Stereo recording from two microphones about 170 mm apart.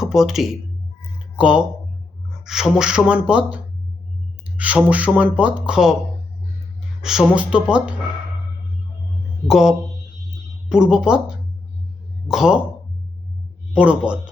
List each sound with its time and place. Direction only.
0.0 s speech: centre (ahead or behind)
7.0 s speech: 5° right (ahead or behind)
9.5 s speech: centre (ahead or behind)
13.7 s speech: 5° right (ahead or behind)